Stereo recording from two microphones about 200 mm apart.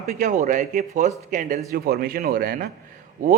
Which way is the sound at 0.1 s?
35° right (ahead or behind).